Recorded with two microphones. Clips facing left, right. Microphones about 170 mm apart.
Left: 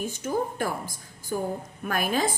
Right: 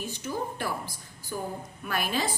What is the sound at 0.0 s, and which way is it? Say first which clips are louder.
A woman's voice: left 5 dB; 50° left (ahead or behind).